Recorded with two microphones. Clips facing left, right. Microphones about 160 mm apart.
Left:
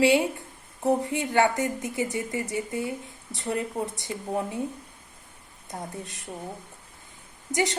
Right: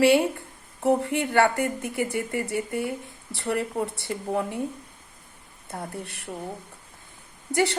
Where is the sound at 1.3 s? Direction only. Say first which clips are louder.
Right 1 dB; 20° left (ahead or behind).